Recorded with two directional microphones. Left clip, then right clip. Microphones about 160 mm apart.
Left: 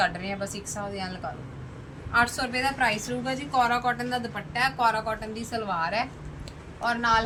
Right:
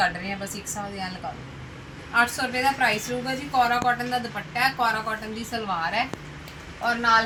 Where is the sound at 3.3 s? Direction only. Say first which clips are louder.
Right 2 dB; 5° left (ahead or behind).